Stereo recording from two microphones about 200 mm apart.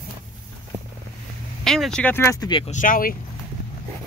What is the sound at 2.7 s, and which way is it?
Speech, 45° left (ahead or behind).